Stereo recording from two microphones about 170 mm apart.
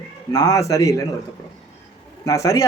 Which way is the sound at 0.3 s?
20° left (ahead or behind).